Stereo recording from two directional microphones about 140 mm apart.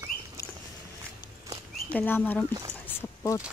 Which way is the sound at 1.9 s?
15° left (ahead or behind).